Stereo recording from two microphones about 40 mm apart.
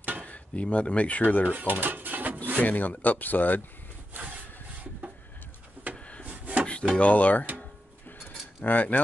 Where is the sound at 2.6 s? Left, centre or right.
Left.